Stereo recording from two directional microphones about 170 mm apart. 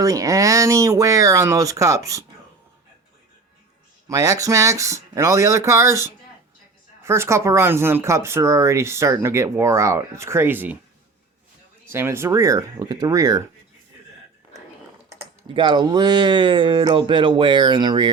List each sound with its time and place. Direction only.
0.0 s speech: 20° right (ahead or behind)
4.1 s speech: 20° right (ahead or behind)
11.9 s speech: 15° right (ahead or behind)
15.5 s speech: 30° right (ahead or behind)